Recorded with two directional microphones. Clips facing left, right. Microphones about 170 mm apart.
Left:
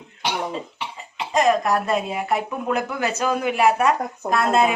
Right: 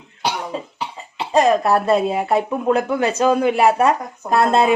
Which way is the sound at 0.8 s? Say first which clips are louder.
Right 3 dB; 35° right (ahead or behind).